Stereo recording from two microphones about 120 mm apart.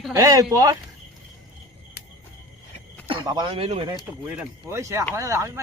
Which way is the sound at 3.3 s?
35° right (ahead or behind).